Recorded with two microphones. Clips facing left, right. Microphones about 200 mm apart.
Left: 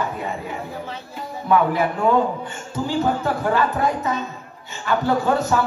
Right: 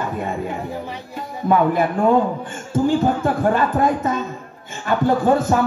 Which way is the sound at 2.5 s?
50° right (ahead or behind).